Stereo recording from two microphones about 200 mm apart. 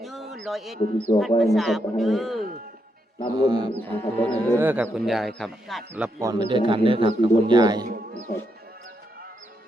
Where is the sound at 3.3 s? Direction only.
20° right (ahead or behind).